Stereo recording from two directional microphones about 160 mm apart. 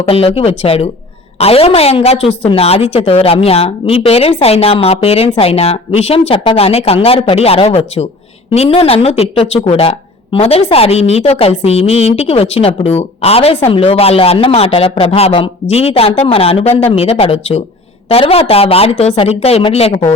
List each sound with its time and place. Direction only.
0.0 s a woman's voice: 40° left (ahead or behind)